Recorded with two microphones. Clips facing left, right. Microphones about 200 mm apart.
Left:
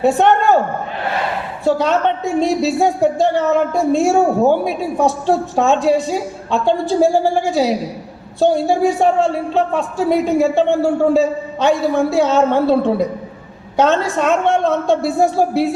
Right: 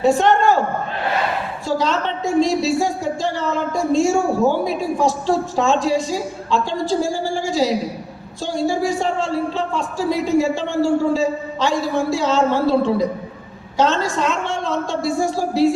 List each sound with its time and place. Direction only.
0.0 s a man's voice: 60° left (ahead or behind)
1.6 s a man's voice: 60° left (ahead or behind)